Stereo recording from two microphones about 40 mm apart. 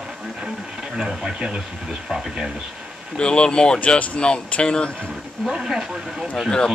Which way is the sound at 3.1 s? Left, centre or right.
Left.